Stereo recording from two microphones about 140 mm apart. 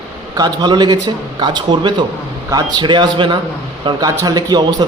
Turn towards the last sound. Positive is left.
turn(degrees=-30)  # may be behind; listen again after turning